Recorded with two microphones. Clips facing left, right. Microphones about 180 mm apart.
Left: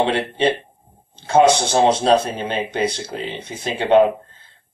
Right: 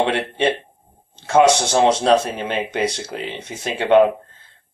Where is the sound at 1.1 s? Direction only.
80° right.